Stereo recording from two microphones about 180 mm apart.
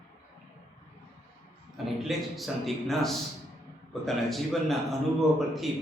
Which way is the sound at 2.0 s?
Centre (ahead or behind).